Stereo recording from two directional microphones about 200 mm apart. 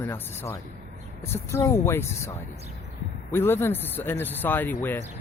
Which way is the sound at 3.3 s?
10° left (ahead or behind).